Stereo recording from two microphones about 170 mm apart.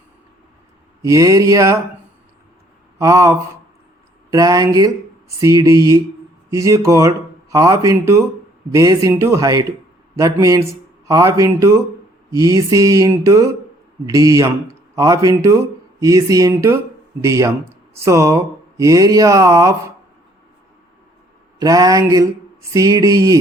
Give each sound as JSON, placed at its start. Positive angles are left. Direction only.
{"t": 1.0, "sound": "speech", "side_deg": -20}
{"t": 3.0, "sound": "speech", "side_deg": -20}
{"t": 21.6, "sound": "speech", "side_deg": -20}